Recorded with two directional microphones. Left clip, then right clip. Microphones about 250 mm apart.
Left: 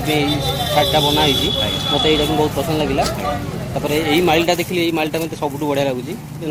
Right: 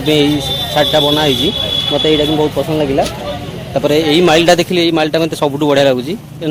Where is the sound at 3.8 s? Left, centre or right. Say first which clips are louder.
Right 6 dB; right.